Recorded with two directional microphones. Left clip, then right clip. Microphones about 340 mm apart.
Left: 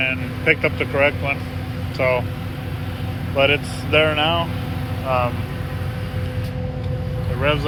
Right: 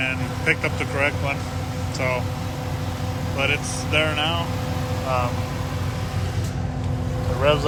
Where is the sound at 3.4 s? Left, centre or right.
Centre.